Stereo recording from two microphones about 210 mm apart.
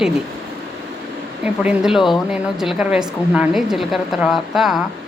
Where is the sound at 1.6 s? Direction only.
Centre (ahead or behind).